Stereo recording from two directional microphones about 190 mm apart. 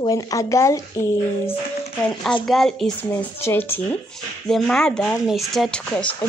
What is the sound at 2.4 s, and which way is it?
Speech, centre (ahead or behind).